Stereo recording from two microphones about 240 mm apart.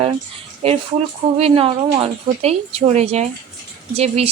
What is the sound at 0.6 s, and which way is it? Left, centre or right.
Speech, right.